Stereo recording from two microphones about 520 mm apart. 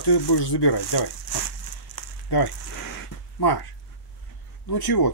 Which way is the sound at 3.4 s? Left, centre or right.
Left.